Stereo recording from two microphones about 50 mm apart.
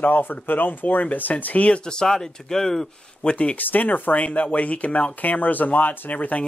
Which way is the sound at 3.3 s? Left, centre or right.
Left.